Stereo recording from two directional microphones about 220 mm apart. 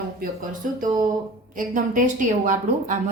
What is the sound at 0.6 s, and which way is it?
A woman's voice, 40° right (ahead or behind).